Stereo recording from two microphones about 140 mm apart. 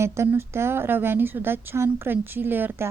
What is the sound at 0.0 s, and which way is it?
Speech, 20° right (ahead or behind).